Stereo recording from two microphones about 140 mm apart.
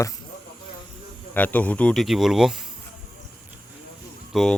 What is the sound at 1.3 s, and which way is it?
Speech, 10° left (ahead or behind).